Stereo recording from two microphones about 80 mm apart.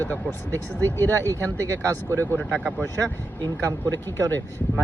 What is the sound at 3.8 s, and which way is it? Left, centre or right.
Speech, left.